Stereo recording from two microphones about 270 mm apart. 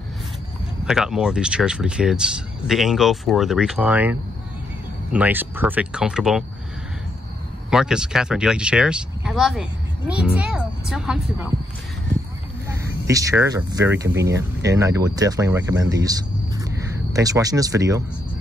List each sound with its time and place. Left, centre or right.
0.8 s speech: centre
7.7 s speech: centre
13.0 s speech: centre
14.0 s speech: right
14.3 s speech: centre